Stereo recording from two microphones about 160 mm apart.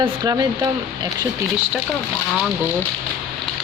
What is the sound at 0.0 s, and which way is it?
Speech, 25° right (ahead or behind).